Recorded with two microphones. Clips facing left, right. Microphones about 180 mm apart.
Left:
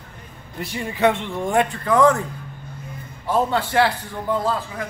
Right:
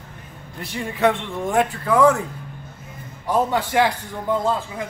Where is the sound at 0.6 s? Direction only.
Centre (ahead or behind).